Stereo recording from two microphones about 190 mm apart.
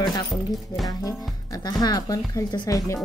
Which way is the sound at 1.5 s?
20° left (ahead or behind).